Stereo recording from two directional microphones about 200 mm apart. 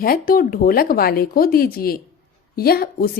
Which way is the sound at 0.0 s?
45° left (ahead or behind).